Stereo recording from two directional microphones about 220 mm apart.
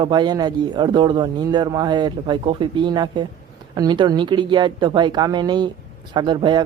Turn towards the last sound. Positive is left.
turn(degrees=-20)  # may be behind; listen again after turning